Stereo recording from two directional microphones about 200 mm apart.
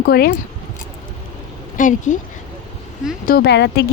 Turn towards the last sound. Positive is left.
turn(degrees=55)  # may be behind; listen again after turning